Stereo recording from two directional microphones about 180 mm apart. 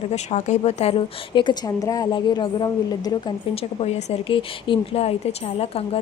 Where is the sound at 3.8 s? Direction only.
35° left (ahead or behind).